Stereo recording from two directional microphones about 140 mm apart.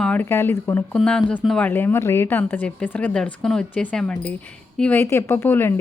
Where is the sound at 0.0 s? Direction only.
10° left (ahead or behind).